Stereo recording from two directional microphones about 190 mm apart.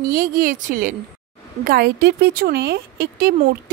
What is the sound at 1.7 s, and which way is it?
Speech, 55° right (ahead or behind).